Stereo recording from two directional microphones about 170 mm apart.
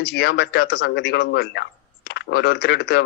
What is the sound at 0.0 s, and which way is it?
Speech, 75° left (ahead or behind).